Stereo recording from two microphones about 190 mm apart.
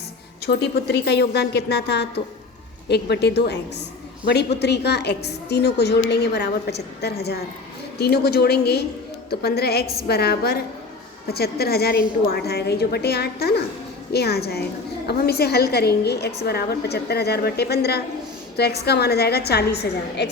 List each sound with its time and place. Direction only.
0.4 s a woman's voice: 60° left (ahead or behind)